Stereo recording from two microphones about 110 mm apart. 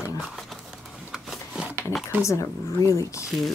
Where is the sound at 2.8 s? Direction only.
30° left (ahead or behind).